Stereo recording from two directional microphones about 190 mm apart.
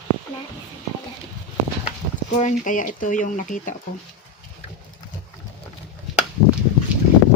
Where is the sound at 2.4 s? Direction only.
40° left (ahead or behind).